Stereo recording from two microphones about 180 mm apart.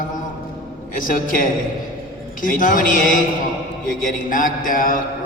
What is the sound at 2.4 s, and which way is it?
Speech, 50° left (ahead or behind).